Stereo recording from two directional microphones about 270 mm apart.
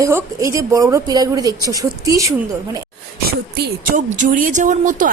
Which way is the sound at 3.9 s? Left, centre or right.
Right.